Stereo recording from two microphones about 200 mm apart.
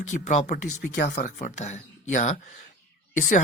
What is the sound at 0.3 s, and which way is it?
Speech, 40° left (ahead or behind).